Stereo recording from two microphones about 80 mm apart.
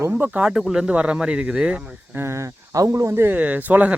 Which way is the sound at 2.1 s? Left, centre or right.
Right.